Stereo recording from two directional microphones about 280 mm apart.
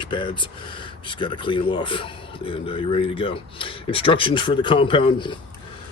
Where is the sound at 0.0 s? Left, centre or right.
Centre.